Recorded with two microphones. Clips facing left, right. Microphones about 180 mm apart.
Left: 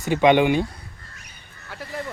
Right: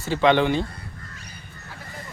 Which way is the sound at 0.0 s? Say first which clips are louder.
Left 2 dB; 15° left (ahead or behind).